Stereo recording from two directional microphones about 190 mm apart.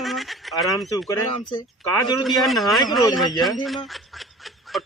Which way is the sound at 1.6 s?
20° left (ahead or behind).